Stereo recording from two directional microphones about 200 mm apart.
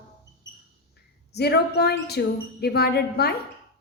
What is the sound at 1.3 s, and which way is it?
A woman's voice, 55° left (ahead or behind).